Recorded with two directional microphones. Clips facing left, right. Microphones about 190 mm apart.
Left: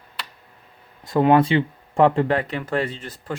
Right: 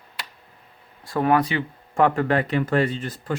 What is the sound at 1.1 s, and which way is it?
Speech, 20° left (ahead or behind).